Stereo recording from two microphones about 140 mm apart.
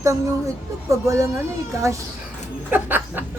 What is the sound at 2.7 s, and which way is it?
Speech, 15° right (ahead or behind).